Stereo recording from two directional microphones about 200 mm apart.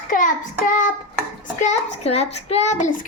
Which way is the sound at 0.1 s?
40° left (ahead or behind).